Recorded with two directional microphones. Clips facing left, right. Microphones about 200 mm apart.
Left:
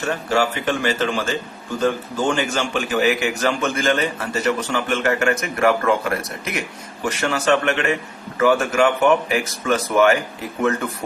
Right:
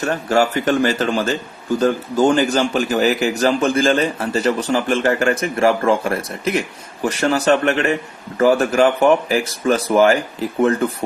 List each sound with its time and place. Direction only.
0.0 s a man's voice: 40° right (ahead or behind)